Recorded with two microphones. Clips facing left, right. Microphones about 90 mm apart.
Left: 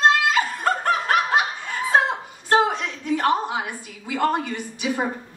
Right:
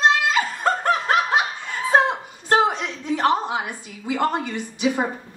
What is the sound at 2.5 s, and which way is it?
Chuckle, 20° right (ahead or behind).